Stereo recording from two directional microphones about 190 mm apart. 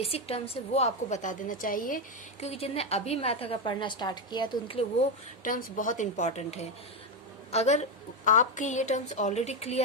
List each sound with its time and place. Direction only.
0.0 s a woman's voice: 30° left (ahead or behind); by 2.0 s 45° left (ahead or behind)
2.4 s a woman's voice: 30° left (ahead or behind)
5.4 s a woman's voice: 45° left (ahead or behind)